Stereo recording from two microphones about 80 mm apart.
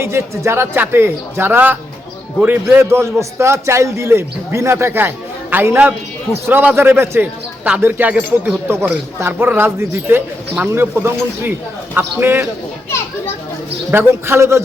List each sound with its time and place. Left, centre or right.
0.0 s a man's voice: right
13.9 s a man's voice: right